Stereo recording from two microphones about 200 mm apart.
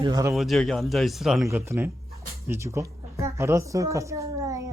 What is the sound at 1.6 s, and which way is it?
A woman's voice, 15° right (ahead or behind).